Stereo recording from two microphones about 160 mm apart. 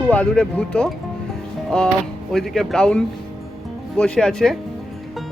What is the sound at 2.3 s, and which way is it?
Speech, centre (ahead or behind).